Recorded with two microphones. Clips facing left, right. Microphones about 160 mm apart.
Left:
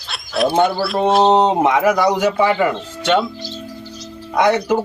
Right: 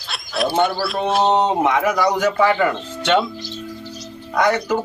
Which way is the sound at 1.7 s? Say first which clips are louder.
Left 3 dB; 15° left (ahead or behind).